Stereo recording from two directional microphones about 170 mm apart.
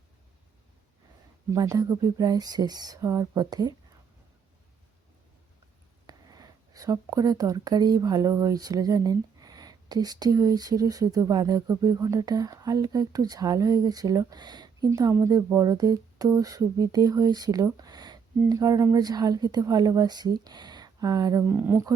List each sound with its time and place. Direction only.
1.5 s speech: 20° right (ahead or behind)
6.1 s speech: 20° right (ahead or behind)